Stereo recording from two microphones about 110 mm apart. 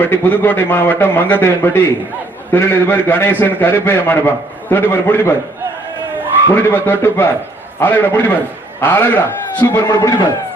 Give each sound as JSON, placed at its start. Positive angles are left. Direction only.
{"t": 0.0, "sound": "a man's voice", "side_deg": 15}
{"t": 6.5, "sound": "a man's voice", "side_deg": 20}
{"t": 9.6, "sound": "a man's voice", "side_deg": 35}